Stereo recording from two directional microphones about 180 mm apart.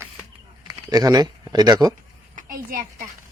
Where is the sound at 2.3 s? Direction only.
50° right (ahead or behind).